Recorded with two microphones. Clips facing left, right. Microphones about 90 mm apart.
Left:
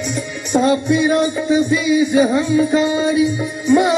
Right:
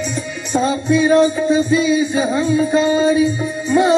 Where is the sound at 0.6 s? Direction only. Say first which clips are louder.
Right 1 dB; 60° left (ahead or behind).